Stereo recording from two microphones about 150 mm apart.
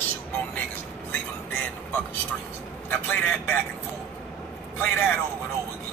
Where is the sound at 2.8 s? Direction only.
10° left (ahead or behind).